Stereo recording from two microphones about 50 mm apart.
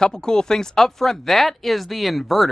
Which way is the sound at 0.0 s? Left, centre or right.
Centre.